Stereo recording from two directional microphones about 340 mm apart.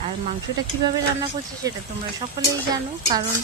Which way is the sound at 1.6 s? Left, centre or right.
Centre.